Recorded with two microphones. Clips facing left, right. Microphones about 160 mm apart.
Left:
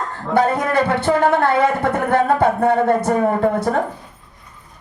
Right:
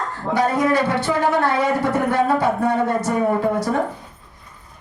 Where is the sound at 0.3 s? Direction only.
55° left (ahead or behind).